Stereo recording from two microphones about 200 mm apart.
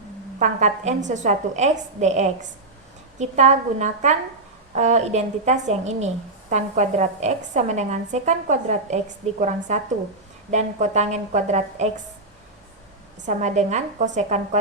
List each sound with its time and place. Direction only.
0.3 s a woman's voice: 35° right (ahead or behind)
13.2 s a woman's voice: 35° right (ahead or behind)